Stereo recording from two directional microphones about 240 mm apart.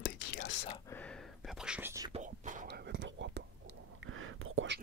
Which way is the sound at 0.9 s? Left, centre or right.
Centre.